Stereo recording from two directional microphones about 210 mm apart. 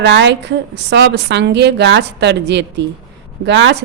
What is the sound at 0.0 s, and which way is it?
A woman's voice, 55° right (ahead or behind).